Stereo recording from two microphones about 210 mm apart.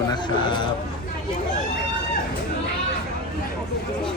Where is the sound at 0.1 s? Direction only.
20° left (ahead or behind).